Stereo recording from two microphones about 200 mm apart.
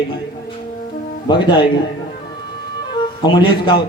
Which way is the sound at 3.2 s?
20° left (ahead or behind).